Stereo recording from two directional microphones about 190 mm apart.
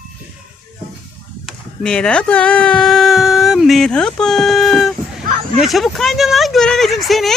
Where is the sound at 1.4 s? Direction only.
5° left (ahead or behind).